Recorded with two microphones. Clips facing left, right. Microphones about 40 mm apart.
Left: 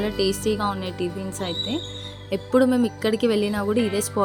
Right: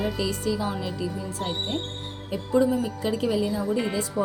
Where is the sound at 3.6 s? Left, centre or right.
Left.